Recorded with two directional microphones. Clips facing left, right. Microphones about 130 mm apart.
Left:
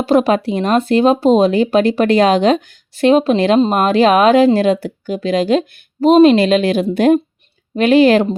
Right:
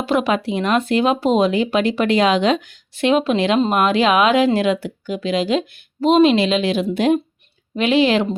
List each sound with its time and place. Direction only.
0.0 s speech: 40° left (ahead or behind)